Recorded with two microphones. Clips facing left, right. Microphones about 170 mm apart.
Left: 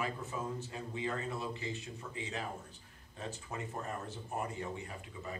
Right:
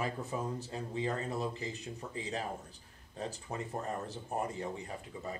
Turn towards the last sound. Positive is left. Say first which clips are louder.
# right 3 dB
turn(degrees=-35)  # may be behind; listen again after turning